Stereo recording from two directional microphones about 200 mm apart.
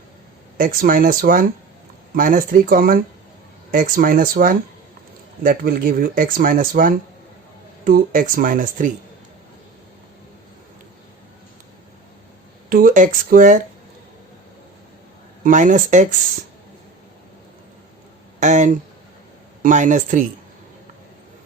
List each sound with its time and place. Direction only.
0.5 s speech: 45° right (ahead or behind)
12.6 s speech: 45° right (ahead or behind)
15.4 s speech: 40° right (ahead or behind)
18.3 s speech: 40° right (ahead or behind)